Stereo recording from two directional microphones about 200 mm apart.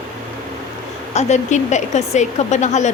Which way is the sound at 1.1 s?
35° left (ahead or behind).